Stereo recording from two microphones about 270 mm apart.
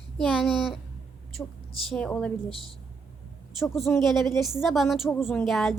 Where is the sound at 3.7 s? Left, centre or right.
Centre.